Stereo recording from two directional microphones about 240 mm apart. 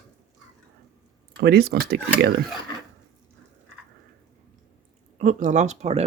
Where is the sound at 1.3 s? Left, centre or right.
Right.